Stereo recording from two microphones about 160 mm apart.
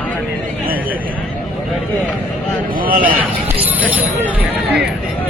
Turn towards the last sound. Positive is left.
turn(degrees=-10)  # may be behind; listen again after turning